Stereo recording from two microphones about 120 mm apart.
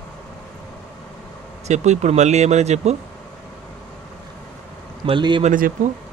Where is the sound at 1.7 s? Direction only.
70° right (ahead or behind).